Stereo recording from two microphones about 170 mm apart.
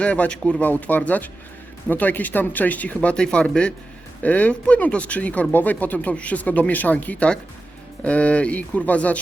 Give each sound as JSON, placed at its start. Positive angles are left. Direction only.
{"t": 0.0, "sound": "speech", "side_deg": 5}